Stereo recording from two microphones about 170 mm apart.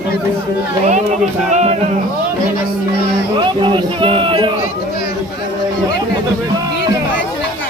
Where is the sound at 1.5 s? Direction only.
45° right (ahead or behind).